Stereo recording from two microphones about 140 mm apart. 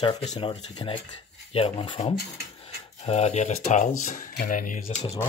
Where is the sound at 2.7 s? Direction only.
50° left (ahead or behind).